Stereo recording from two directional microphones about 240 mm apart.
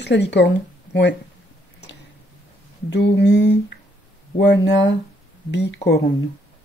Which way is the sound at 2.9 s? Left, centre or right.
Left.